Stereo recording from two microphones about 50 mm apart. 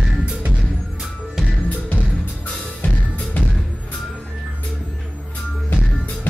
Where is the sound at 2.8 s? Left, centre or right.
Left.